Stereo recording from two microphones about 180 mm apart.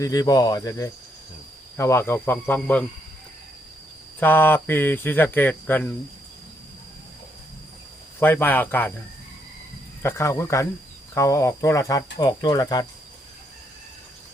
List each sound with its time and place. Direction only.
0.0 s cricket: 20° left (ahead or behind)
1.7 s speech: 15° left (ahead or behind)
4.2 s speech: 10° left (ahead or behind)
8.2 s speech: 10° left (ahead or behind)
10.0 s speech: 15° left (ahead or behind)
12.2 s cricket: 20° left (ahead or behind)